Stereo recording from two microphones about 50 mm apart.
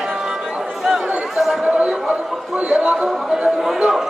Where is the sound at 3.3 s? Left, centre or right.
Centre.